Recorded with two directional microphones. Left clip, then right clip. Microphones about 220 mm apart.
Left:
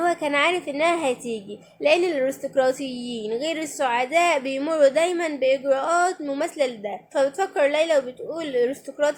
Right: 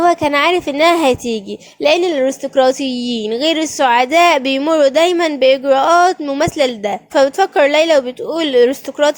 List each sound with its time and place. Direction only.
0.0 s a woman's voice: 35° right (ahead or behind)